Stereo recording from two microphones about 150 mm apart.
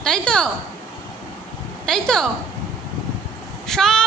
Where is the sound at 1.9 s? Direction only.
5° left (ahead or behind).